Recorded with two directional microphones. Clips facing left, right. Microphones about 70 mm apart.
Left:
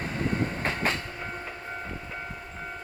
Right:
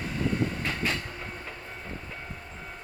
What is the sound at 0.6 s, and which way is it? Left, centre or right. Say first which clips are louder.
Train: left 2 dB; left.